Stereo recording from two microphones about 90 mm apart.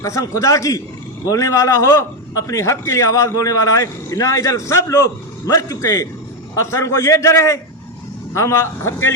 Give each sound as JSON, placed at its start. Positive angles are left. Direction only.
{"t": 0.0, "sound": "a man's voice", "side_deg": 35}